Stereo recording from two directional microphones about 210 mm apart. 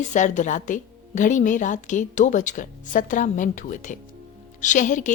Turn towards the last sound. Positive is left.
turn(degrees=35)  # may be behind; listen again after turning